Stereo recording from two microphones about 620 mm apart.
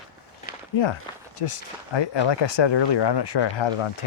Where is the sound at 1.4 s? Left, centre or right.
Left.